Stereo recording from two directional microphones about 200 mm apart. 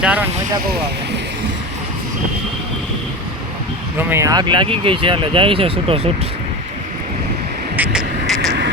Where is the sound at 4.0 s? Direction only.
10° right (ahead or behind); by 6.3 s 30° right (ahead or behind).